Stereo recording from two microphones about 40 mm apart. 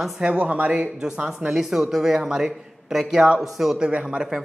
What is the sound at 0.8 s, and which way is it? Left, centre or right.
A man's voice, centre.